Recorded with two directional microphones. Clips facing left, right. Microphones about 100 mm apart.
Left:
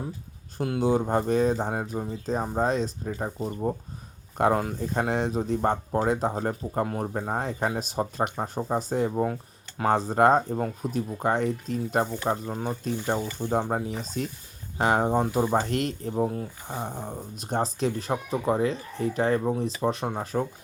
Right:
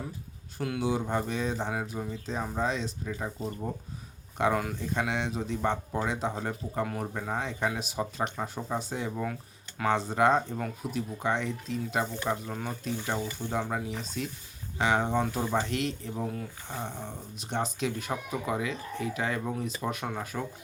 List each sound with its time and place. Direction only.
0.6 s speech: 30° left (ahead or behind)
4.4 s speech: 45° left (ahead or behind)
12.2 s speech: 30° left (ahead or behind)